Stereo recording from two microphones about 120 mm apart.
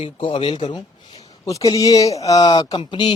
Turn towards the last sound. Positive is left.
turn(degrees=45)  # may be behind; listen again after turning